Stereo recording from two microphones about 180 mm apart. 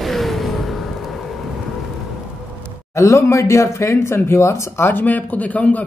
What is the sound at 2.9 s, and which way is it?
Speech, 15° left (ahead or behind).